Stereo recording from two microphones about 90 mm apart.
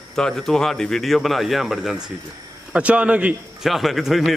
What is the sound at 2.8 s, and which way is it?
Speech, 15° right (ahead or behind).